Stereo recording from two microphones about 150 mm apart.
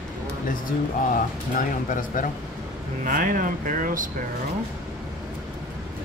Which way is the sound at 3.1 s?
60° right (ahead or behind).